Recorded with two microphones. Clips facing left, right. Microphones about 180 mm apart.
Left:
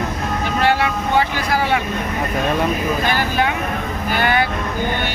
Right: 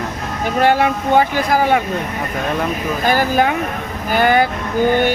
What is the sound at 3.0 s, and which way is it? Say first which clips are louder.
Speech: right 4 dB; 45° right (ahead or behind).